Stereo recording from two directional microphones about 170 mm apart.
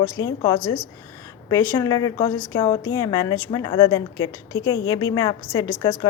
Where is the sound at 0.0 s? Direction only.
20° left (ahead or behind).